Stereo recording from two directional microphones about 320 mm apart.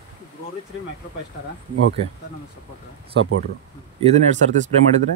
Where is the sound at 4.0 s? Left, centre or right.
Right.